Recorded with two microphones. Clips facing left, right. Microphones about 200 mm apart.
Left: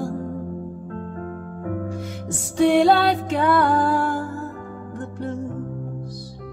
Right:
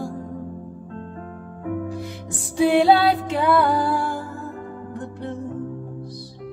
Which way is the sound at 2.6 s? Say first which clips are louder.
Even; 5° right (ahead or behind).